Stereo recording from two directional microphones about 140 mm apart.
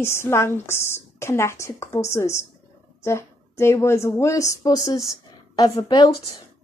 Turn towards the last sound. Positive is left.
turn(degrees=30)  # may be behind; listen again after turning